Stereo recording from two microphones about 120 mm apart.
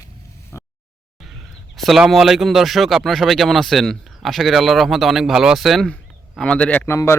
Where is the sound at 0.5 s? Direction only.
20° left (ahead or behind).